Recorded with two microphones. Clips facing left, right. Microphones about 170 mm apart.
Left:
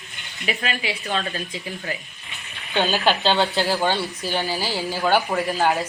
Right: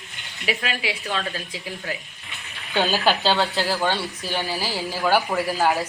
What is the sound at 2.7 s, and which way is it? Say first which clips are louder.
Speech: even; 20° left (ahead or behind).